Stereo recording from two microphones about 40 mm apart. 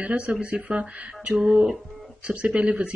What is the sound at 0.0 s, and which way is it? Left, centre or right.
Speech, right.